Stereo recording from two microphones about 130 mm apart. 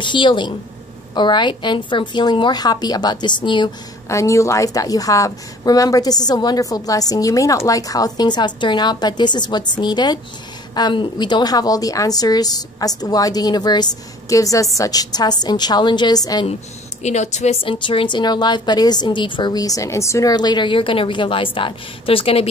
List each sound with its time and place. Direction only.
0.0 s a woman's voice: 40° left (ahead or behind)
4.1 s a woman's voice: 25° left (ahead or behind)
17.0 s speech: 60° left (ahead or behind)
17.6 s a woman's voice: 40° left (ahead or behind)